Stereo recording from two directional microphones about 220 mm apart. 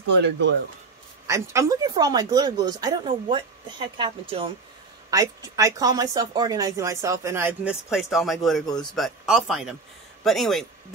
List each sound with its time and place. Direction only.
0.1 s speech: 55° right (ahead or behind)
1.2 s a woman's voice: 15° right (ahead or behind)